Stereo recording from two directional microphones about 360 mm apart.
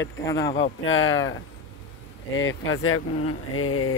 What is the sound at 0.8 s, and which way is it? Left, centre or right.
Speech, left.